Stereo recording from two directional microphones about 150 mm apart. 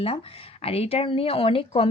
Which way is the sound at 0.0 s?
40° left (ahead or behind).